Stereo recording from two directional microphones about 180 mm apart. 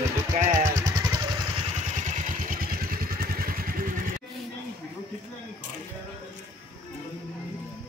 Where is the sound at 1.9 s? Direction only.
45° right (ahead or behind).